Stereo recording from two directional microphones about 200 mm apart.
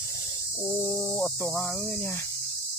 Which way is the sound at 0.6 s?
15° left (ahead or behind).